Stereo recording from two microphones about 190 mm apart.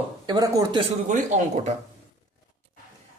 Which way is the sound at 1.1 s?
40° right (ahead or behind).